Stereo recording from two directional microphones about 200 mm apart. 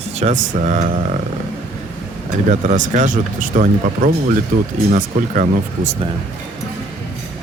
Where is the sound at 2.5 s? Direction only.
40° right (ahead or behind).